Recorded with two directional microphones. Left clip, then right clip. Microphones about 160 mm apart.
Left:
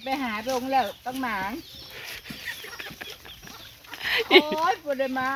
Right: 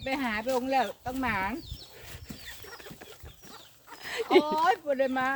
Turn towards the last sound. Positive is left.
turn(degrees=-30)  # may be behind; listen again after turning